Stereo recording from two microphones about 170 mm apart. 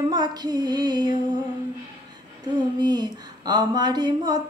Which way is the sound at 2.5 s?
25° right (ahead or behind).